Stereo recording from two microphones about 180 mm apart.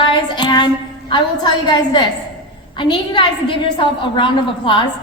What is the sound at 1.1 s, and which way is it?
A woman's voice, 25° left (ahead or behind).